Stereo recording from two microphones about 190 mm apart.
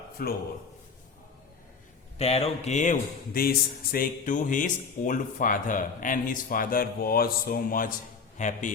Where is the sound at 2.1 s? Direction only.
35° left (ahead or behind).